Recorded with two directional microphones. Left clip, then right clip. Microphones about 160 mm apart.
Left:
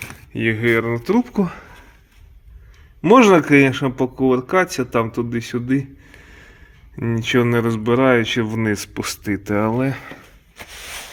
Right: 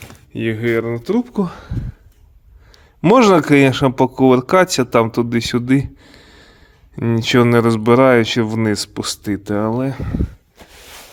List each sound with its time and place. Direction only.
0.0 s speech: 10° right (ahead or behind)
1.5 s speech: 20° right (ahead or behind)
3.0 s speech: 35° right (ahead or behind)
6.1 s speech: 20° right (ahead or behind)